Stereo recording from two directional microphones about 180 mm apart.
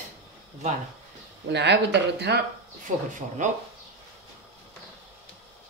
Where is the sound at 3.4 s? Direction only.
45° right (ahead or behind).